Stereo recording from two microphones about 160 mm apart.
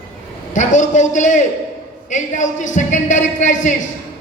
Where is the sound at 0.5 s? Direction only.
50° left (ahead or behind).